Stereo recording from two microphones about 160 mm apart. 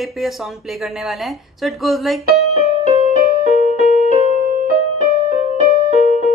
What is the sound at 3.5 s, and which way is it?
Music, 45° left (ahead or behind).